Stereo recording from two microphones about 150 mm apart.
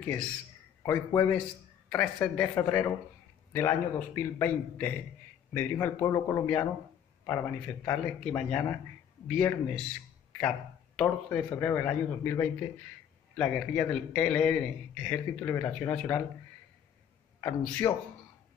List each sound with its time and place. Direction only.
0.8 s a man's voice: 20° left (ahead or behind)
11.2 s a man's voice: 15° left (ahead or behind)
17.4 s a man's voice: 20° left (ahead or behind)